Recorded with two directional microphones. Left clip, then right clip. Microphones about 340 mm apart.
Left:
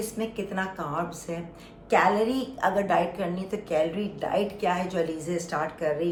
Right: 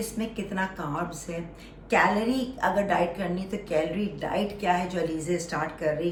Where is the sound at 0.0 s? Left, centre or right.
Centre.